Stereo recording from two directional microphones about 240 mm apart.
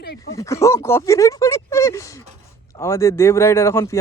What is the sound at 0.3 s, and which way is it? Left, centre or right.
A man's voice, centre.